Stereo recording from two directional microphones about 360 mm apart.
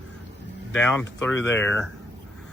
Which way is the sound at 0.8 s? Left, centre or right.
Centre.